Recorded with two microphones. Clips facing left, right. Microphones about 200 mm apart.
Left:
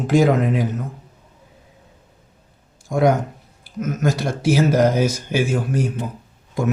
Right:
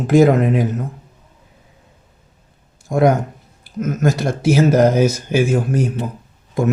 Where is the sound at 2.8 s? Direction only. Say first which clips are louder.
Right 2 dB; 55° right (ahead or behind).